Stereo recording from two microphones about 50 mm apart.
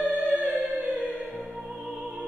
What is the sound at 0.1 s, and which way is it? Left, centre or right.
Music, right.